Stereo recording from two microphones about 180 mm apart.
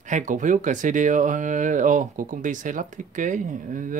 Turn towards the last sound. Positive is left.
turn(degrees=-45)  # may be behind; listen again after turning